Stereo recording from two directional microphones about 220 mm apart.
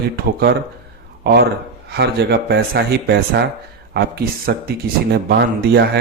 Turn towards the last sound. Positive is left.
turn(degrees=-50)  # may be behind; listen again after turning